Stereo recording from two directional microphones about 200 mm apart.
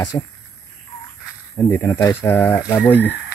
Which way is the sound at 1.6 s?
15° left (ahead or behind).